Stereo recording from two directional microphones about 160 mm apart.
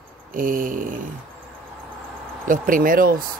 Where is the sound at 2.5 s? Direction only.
60° right (ahead or behind).